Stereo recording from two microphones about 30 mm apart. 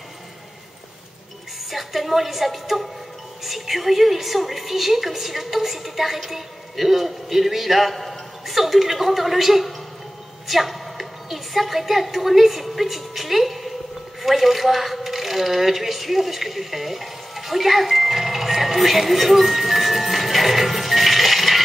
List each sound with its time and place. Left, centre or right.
1.7 s a woman's voice: centre